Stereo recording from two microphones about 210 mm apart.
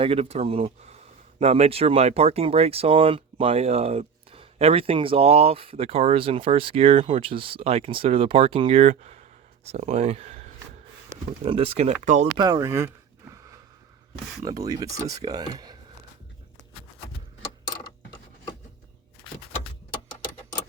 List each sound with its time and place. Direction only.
0.0 s speech: 25° right (ahead or behind)
12.4 s speech: 20° right (ahead or behind)
14.4 s speech: 15° right (ahead or behind)